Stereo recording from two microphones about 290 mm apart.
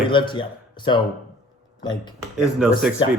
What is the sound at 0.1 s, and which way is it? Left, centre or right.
Speech, centre.